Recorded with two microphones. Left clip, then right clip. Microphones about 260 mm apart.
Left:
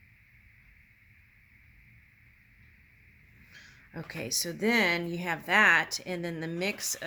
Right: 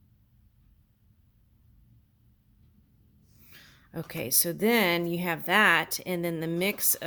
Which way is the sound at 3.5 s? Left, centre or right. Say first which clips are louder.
Right 4 dB; right.